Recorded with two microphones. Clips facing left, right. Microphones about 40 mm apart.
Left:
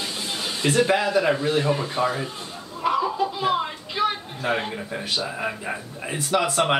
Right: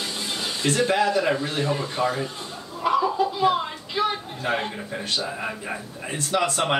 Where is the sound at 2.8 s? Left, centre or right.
Centre.